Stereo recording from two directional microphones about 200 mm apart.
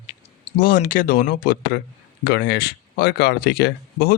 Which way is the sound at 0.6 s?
45° left (ahead or behind).